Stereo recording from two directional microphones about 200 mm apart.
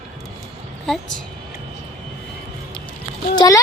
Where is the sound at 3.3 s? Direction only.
20° left (ahead or behind).